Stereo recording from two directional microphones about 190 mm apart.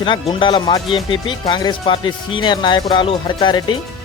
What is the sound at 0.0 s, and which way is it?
Speech, 25° left (ahead or behind).